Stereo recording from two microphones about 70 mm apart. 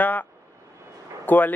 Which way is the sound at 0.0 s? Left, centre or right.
Left.